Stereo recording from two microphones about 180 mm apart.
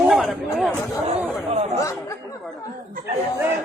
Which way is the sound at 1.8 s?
20° left (ahead or behind).